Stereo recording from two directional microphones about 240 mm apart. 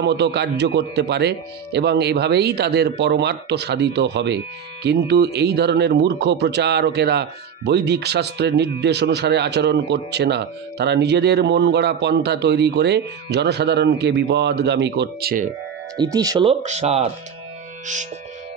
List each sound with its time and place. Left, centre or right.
0.0 s speech: right
16.0 s speech: centre